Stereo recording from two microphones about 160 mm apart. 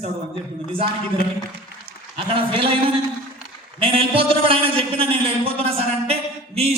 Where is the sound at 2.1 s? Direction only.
35° right (ahead or behind).